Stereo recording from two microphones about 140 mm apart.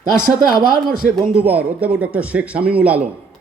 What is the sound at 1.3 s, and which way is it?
A man's voice, 10° right (ahead or behind).